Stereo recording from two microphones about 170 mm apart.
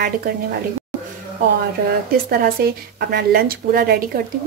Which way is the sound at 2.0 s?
60° right (ahead or behind).